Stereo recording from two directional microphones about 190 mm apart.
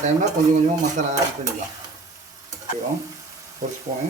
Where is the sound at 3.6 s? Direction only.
40° right (ahead or behind).